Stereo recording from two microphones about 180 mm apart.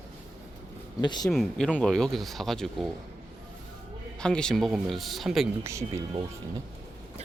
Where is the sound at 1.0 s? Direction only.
25° left (ahead or behind).